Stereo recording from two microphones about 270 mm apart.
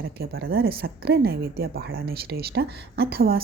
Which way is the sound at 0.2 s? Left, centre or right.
Right.